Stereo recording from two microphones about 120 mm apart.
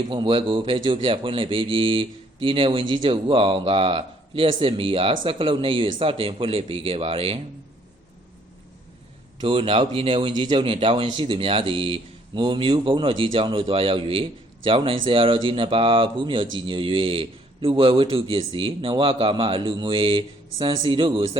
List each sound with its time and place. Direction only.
0.1 s speech: 45° right (ahead or behind)
9.4 s speech: 50° right (ahead or behind)